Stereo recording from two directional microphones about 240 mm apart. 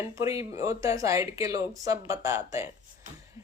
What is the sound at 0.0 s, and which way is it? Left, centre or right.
Speech, centre.